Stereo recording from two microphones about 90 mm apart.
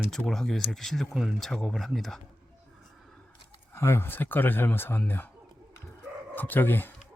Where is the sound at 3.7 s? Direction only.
30° left (ahead or behind).